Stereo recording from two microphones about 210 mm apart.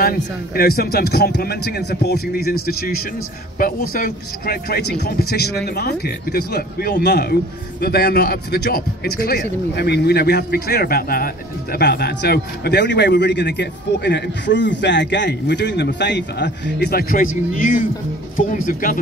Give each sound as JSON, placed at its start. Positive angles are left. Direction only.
{"t": 0.0, "sound": "a man's voice", "side_deg": 45}
{"t": 3.9, "sound": "a man's voice", "side_deg": 45}